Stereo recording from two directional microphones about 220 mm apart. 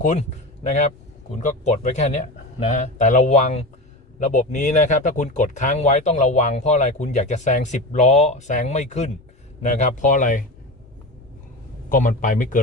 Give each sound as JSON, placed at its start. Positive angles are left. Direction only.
{"t": 0.0, "sound": "speech", "side_deg": 30}
{"t": 11.9, "sound": "speech", "side_deg": 35}